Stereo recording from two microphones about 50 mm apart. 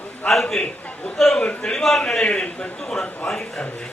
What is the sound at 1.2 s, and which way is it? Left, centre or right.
A man's voice, centre.